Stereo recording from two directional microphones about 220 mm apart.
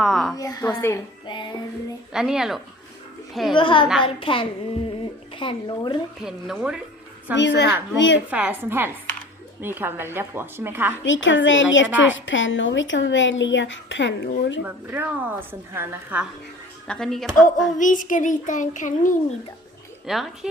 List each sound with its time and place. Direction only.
0.0 s a sound: centre (ahead or behind)
0.3 s a woman's voice: 15° left (ahead or behind)
1.3 s a child's voice: 20° left (ahead or behind)
2.1 s a woman's voice: centre (ahead or behind)
3.5 s a child's voice: 20° left (ahead or behind)
6.2 s a woman's voice: 5° right (ahead or behind)
7.3 s a woman's voice: 50° left (ahead or behind)
8.3 s a woman's voice: 5° right (ahead or behind)
11.0 s a woman's voice: 60° left (ahead or behind)
14.6 s a woman's voice: 10° right (ahead or behind)
16.8 s a woman's voice: 5° left (ahead or behind)
17.7 s child singing: 35° left (ahead or behind)
20.1 s a woman's voice: centre (ahead or behind)